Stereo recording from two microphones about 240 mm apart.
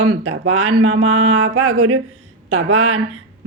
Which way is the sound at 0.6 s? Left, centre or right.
Right.